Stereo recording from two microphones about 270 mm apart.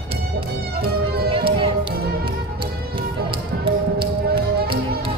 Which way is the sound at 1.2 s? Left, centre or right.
Centre.